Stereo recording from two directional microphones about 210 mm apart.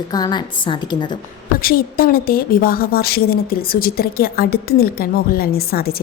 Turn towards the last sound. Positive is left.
turn(degrees=45)  # may be behind; listen again after turning